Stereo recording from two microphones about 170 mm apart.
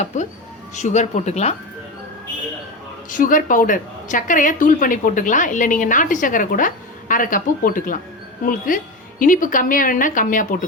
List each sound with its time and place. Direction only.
0.0 s a woman's voice: 45° left (ahead or behind)
3.1 s a woman's voice: 50° left (ahead or behind)